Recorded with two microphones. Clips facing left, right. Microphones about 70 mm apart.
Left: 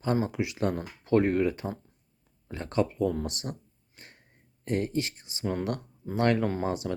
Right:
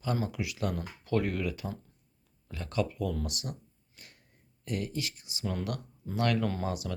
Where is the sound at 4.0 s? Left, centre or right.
Left.